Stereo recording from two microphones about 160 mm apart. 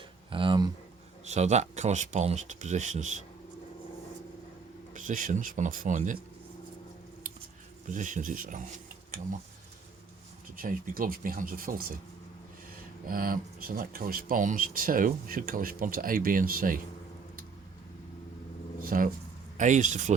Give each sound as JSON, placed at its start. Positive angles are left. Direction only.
{"t": 0.3, "sound": "speech", "side_deg": -30}
{"t": 1.2, "sound": "speech", "side_deg": -45}
{"t": 4.9, "sound": "speech", "side_deg": -55}
{"t": 7.9, "sound": "speech", "side_deg": -50}
{"t": 10.6, "sound": "speech", "side_deg": -60}
{"t": 13.1, "sound": "speech", "side_deg": -60}
{"t": 18.9, "sound": "speech", "side_deg": -60}